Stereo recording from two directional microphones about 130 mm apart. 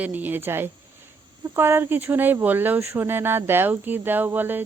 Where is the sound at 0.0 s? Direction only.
15° right (ahead or behind).